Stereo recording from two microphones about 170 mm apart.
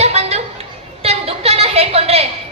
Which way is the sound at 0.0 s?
40° right (ahead or behind).